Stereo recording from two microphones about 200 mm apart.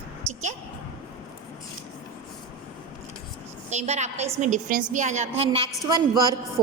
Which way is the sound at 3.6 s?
35° right (ahead or behind).